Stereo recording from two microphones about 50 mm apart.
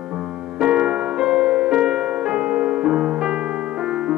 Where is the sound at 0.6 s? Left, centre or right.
Centre.